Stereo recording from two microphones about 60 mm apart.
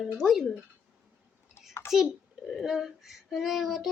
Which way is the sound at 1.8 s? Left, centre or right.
Left.